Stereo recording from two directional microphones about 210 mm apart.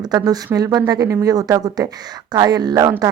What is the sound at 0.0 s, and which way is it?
Speech, 15° right (ahead or behind).